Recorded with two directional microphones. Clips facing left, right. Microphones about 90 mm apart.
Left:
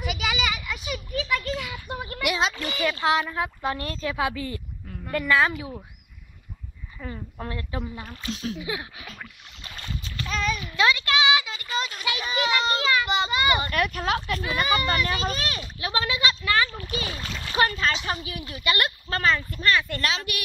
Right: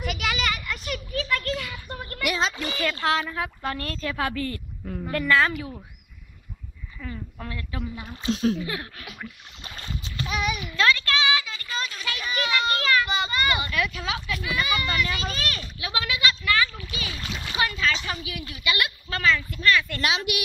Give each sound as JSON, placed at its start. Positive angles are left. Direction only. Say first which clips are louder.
{"t": 0.0, "sound": "a sound", "louder": "even", "side_deg": 5}
{"t": 2.8, "sound": "a woman's voice", "louder": "left 2 dB", "side_deg": 15}
{"t": 7.0, "sound": "speech", "louder": "left 1 dB", "side_deg": 25}
{"t": 8.2, "sound": "speech", "louder": "right 7 dB", "side_deg": -25}
{"t": 8.5, "sound": "a woman's voice", "louder": "even", "side_deg": 10}
{"t": 9.0, "sound": "speech", "louder": "right 2 dB", "side_deg": -10}
{"t": 9.7, "sound": "boat", "louder": "even", "side_deg": -30}
{"t": 10.2, "sound": "a sound", "louder": "even", "side_deg": -10}
{"t": 10.7, "sound": "children playing", "louder": "even", "side_deg": 15}
{"t": 13.6, "sound": "speech", "louder": "left 2 dB", "side_deg": 50}
{"t": 17.2, "sound": "speech", "louder": "even", "side_deg": -5}
{"t": 17.6, "sound": "speech", "louder": "left 2 dB", "side_deg": 40}
{"t": 20.0, "sound": "speech", "louder": "right 2 dB", "side_deg": -15}